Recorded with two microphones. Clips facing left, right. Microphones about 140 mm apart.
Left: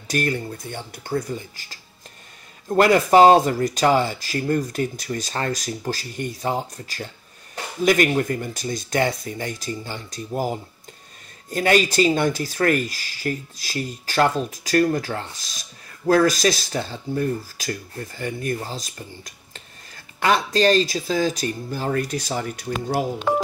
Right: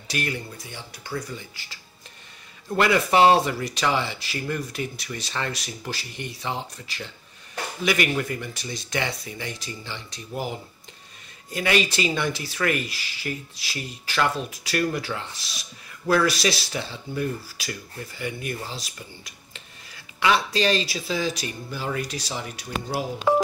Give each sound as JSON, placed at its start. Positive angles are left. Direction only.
{"t": 0.1, "sound": "speech", "side_deg": 45}
{"t": 23.1, "sound": "speech", "side_deg": -5}